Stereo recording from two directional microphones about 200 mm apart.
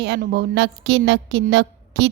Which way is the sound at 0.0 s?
50° right (ahead or behind).